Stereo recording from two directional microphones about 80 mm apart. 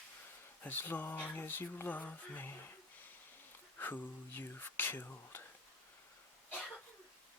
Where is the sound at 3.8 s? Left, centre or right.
Left.